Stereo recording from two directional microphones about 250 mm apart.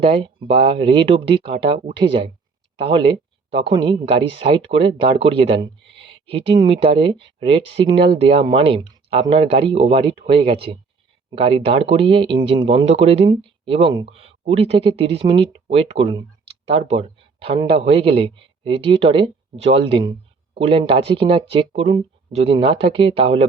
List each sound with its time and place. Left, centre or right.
0.0 s speech: right